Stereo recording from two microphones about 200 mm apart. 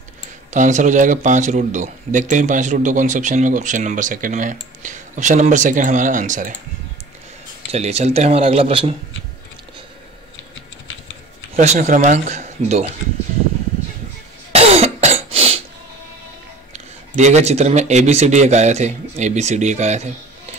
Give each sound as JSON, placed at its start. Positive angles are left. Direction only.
{"t": 0.5, "sound": "speech", "side_deg": -35}
{"t": 7.7, "sound": "speech", "side_deg": -35}
{"t": 11.5, "sound": "speech", "side_deg": -35}
{"t": 14.5, "sound": "cough", "side_deg": -30}
{"t": 16.7, "sound": "speech", "side_deg": -35}